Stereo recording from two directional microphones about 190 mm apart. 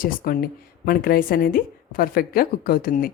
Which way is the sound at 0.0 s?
50° left (ahead or behind).